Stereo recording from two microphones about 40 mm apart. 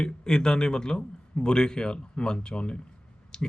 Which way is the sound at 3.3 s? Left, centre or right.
Left.